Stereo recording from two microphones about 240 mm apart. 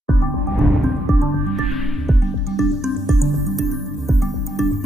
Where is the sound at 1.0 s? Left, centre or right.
Centre.